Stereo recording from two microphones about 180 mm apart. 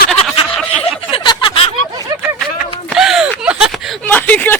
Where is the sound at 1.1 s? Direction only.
25° left (ahead or behind).